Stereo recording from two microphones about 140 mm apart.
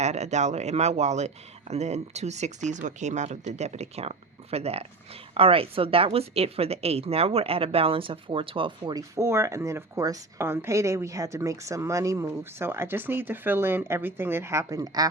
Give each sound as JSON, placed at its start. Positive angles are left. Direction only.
{"t": 0.0, "sound": "a woman's voice", "side_deg": -55}